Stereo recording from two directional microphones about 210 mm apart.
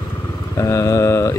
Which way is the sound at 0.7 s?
15° left (ahead or behind).